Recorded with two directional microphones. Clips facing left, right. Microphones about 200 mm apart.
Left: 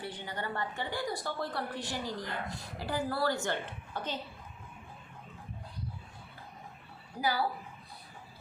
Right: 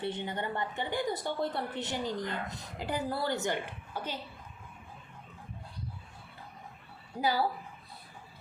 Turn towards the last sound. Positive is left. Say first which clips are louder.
# right 2 dB
turn(degrees=-25)  # may be behind; listen again after turning